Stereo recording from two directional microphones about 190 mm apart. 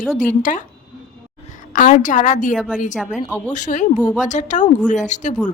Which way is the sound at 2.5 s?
5° left (ahead or behind).